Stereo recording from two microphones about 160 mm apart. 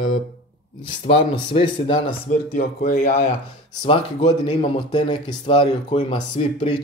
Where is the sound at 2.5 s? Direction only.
45° left (ahead or behind); by 6.8 s 30° left (ahead or behind).